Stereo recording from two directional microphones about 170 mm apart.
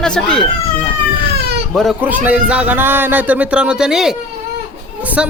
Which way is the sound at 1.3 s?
75° right (ahead or behind).